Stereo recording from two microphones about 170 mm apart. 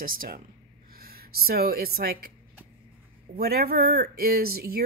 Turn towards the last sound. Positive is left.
turn(degrees=-65)  # may be behind; listen again after turning